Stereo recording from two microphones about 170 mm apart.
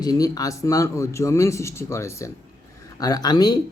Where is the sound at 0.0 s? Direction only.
20° left (ahead or behind).